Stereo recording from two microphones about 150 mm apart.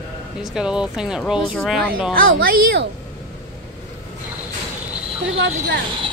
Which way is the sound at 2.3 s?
75° right (ahead or behind).